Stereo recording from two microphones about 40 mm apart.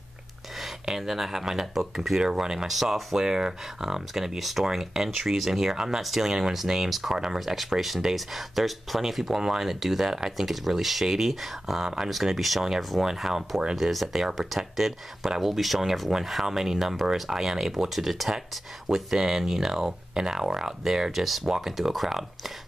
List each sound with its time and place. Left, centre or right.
0.6 s speech: centre
13.0 s speech: centre